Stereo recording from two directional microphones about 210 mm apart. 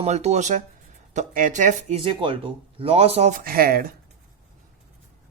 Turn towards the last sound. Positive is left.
turn(degrees=-45)  # may be behind; listen again after turning